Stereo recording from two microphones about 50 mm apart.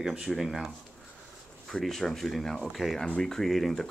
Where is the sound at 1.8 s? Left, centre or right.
Centre.